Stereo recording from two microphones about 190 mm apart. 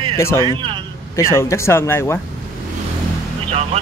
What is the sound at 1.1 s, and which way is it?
Speech, 15° left (ahead or behind).